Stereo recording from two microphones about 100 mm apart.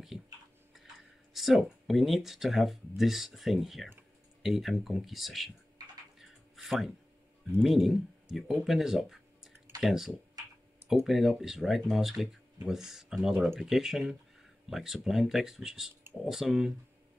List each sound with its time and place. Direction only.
1.3 s speech: centre (ahead or behind)
6.1 s a sound: centre (ahead or behind)
7.6 s speech: centre (ahead or behind)